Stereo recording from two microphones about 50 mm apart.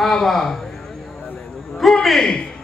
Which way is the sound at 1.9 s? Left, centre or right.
Centre.